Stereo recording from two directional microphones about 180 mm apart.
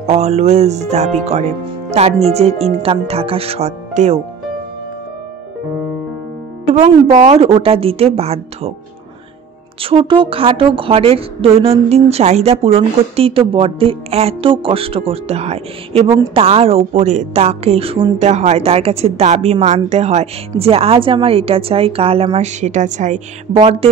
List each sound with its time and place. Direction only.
0.0 s a woman's voice: 35° right (ahead or behind)
6.7 s a woman's voice: 40° right (ahead or behind)
9.8 s a woman's voice: 30° right (ahead or behind)